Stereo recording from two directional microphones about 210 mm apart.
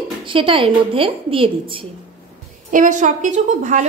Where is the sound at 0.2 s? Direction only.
25° right (ahead or behind).